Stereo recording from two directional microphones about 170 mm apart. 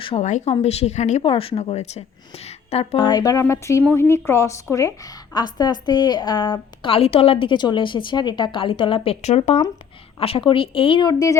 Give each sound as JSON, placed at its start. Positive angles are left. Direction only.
{"t": 0.0, "sound": "a woman's voice", "side_deg": 35}
{"t": 3.0, "sound": "a woman's voice", "side_deg": 20}